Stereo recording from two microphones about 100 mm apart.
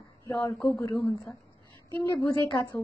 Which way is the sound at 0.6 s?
30° left (ahead or behind).